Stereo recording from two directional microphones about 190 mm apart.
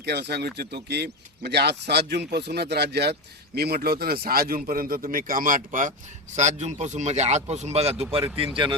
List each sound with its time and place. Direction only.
0.0 s speech: 60° right (ahead or behind); by 8.2 s 30° right (ahead or behind)